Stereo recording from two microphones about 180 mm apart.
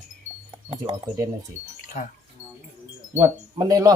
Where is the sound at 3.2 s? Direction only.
15° right (ahead or behind).